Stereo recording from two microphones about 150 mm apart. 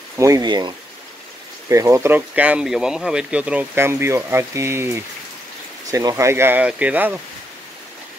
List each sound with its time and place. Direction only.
0.2 s speech: 25° right (ahead or behind)